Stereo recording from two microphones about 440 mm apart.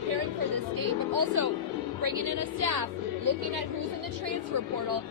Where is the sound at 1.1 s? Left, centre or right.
Right.